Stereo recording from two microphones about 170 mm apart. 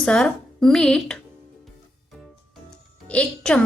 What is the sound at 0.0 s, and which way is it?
Speech, 5° left (ahead or behind).